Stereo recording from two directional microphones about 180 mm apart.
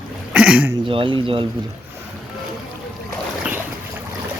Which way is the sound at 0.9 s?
30° right (ahead or behind).